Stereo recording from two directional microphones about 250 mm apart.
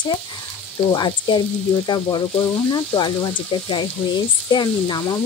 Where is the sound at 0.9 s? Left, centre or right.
Centre.